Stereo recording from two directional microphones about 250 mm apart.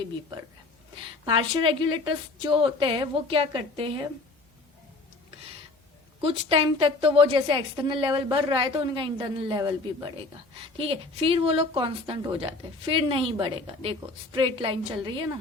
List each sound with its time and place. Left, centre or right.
1.2 s a woman's voice: centre
6.2 s a woman's voice: right
10.8 s a woman's voice: right